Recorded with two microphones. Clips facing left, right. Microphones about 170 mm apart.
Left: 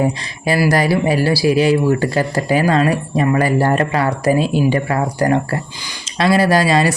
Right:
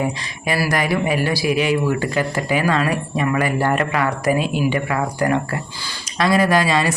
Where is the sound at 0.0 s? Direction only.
35° left (ahead or behind).